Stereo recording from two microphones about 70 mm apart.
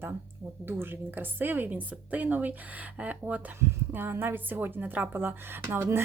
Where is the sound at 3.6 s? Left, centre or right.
Right.